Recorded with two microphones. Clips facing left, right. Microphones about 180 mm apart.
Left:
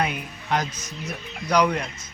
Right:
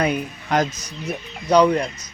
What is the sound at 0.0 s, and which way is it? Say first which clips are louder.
Speech: right 5 dB; 45° right (ahead or behind).